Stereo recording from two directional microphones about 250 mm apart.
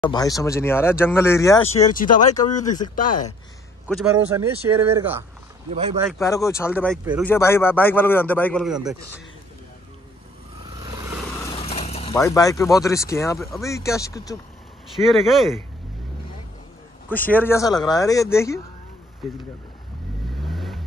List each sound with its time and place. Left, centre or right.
0.1 s a man's voice: centre
2.0 s speech: left
3.8 s a man's voice: centre
5.7 s speech: right
6.1 s a man's voice: centre
10.6 s vehicle: centre
11.5 s vehicle: left
12.1 s a man's voice: centre
15.0 s a man's voice: centre
17.1 s a man's voice: centre
20.3 s vehicle: centre